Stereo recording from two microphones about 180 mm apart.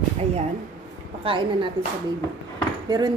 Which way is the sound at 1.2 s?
30° right (ahead or behind).